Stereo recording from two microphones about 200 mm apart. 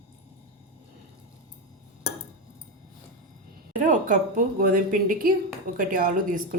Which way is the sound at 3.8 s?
40° right (ahead or behind).